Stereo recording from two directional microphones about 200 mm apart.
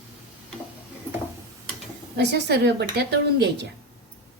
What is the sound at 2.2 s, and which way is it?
A woman's voice, 55° right (ahead or behind).